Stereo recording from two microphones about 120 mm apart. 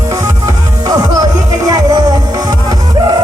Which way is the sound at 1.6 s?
30° right (ahead or behind).